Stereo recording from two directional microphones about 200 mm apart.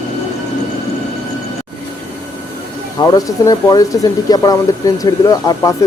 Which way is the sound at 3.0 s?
20° left (ahead or behind).